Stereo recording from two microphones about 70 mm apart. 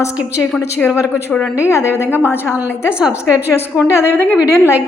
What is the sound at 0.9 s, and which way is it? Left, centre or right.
A woman's voice, left.